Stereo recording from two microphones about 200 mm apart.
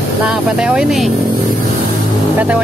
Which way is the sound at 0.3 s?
5° right (ahead or behind).